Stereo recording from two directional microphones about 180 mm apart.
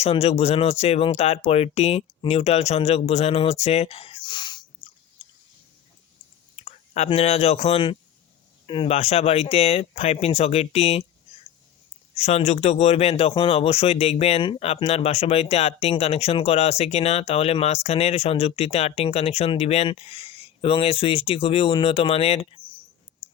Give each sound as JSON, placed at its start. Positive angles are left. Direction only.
{"t": 0.0, "sound": "speech", "side_deg": 35}
{"t": 6.7, "sound": "speech", "side_deg": 35}
{"t": 12.1, "sound": "speech", "side_deg": 35}